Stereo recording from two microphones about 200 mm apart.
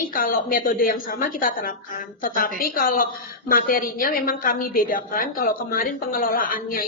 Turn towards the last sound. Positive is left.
turn(degrees=45)  # may be behind; listen again after turning